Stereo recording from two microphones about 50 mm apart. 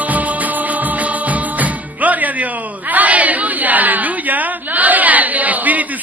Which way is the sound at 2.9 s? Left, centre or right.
Right.